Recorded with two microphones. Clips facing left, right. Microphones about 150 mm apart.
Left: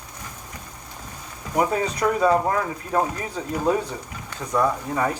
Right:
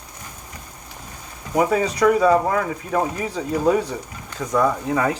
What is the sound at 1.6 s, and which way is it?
Speech, 90° right.